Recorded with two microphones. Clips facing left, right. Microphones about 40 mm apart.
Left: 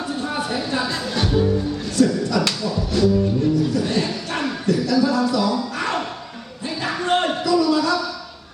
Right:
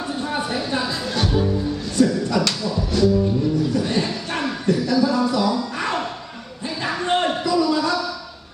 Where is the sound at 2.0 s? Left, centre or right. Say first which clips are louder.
Even; centre.